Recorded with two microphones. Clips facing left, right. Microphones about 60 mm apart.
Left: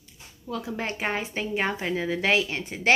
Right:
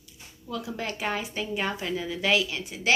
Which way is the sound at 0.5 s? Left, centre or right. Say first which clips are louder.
Left 2 dB; left.